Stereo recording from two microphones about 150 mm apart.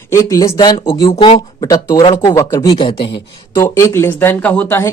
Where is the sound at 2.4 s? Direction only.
20° left (ahead or behind).